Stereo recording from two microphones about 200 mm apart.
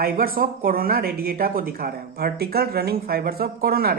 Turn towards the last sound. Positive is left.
turn(degrees=-50)  # may be behind; listen again after turning